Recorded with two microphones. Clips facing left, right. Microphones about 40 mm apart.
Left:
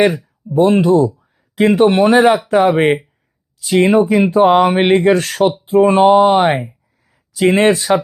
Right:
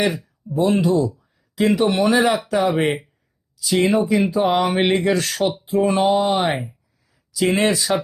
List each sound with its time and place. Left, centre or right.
0.5 s speech: left